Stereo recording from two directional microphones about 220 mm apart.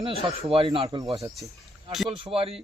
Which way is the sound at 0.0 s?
25° right (ahead or behind).